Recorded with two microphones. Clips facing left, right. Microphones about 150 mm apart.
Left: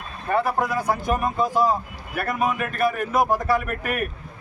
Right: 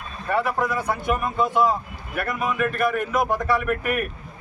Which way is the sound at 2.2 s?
25° left (ahead or behind).